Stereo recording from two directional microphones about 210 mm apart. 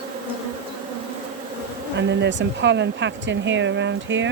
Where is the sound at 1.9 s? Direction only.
55° right (ahead or behind).